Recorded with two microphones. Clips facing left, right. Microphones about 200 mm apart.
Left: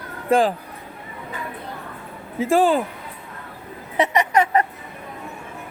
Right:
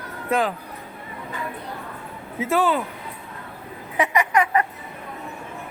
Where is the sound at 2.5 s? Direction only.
45° left (ahead or behind).